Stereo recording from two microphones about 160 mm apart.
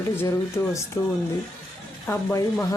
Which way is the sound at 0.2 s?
20° left (ahead or behind).